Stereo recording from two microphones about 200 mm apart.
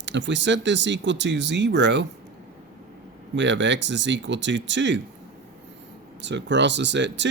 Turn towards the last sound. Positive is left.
turn(degrees=-60)  # may be behind; listen again after turning